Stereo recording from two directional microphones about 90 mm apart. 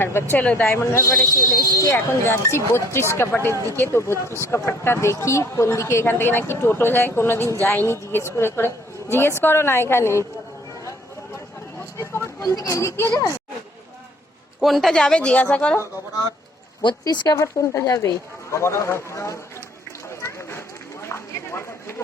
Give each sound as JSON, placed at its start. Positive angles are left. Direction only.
{"t": 0.0, "sound": "speech", "side_deg": 25}
{"t": 11.9, "sound": "speech", "side_deg": 30}
{"t": 14.6, "sound": "speech", "side_deg": 0}
{"t": 17.0, "sound": "speech", "side_deg": 50}
{"t": 17.3, "sound": "speech", "side_deg": 35}
{"t": 20.2, "sound": "run", "side_deg": 30}